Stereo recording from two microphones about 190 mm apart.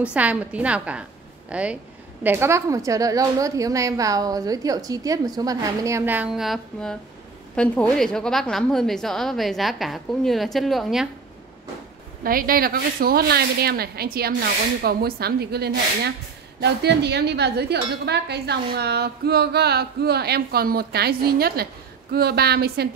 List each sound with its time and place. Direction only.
0.0 s a woman's voice: 5° right (ahead or behind)
12.2 s speech: 50° right (ahead or behind)